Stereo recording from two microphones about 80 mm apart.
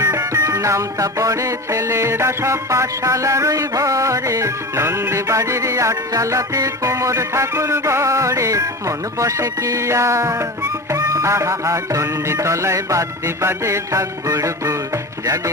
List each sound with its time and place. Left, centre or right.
0.0 s music: right